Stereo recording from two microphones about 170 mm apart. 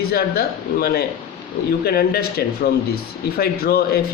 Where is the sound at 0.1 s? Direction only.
65° left (ahead or behind).